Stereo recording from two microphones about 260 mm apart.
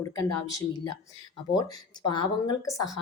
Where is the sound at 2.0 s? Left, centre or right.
Centre.